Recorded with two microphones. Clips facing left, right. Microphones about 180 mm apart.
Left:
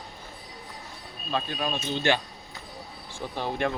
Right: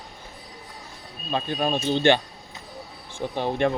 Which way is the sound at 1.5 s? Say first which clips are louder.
Right 6 dB; 35° right (ahead or behind).